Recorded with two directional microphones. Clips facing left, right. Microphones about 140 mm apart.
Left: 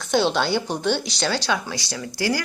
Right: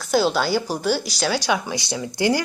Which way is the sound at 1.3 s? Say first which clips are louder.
Right 2 dB; 15° right (ahead or behind).